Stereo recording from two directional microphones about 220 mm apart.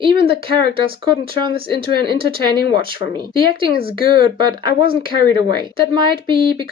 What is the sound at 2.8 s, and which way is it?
Speech, 25° right (ahead or behind).